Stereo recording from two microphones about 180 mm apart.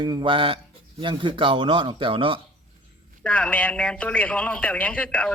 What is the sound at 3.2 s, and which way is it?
A man's voice, 5° left (ahead or behind).